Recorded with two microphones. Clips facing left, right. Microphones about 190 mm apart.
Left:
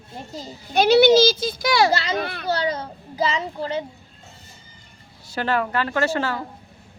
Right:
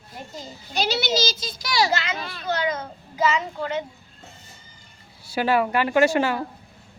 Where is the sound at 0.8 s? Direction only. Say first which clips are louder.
Left 11 dB; 55° left (ahead or behind).